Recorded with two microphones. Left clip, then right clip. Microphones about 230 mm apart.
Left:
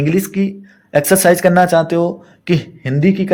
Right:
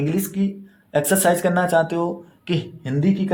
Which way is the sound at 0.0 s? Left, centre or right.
Left.